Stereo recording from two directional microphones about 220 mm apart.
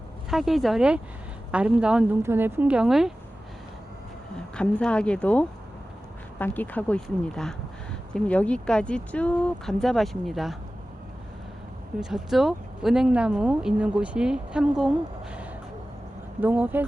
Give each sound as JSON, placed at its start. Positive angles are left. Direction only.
{"t": 0.3, "sound": "speech", "side_deg": 0}
{"t": 4.5, "sound": "speech", "side_deg": 5}
{"t": 11.9, "sound": "speech", "side_deg": 0}